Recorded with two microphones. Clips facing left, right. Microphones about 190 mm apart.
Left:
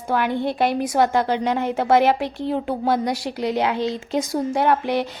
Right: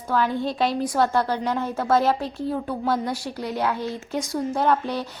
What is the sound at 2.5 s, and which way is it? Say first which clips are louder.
Speech: left 4 dB; 15° left (ahead or behind).